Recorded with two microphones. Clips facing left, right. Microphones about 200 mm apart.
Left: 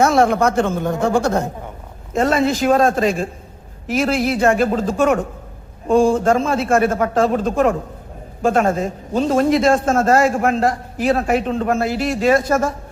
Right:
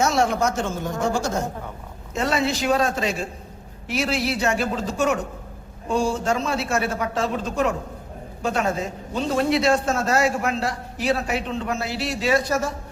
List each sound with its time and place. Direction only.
0.0 s a woman's voice: 55° left (ahead or behind)
2.1 s a man's voice: 50° left (ahead or behind)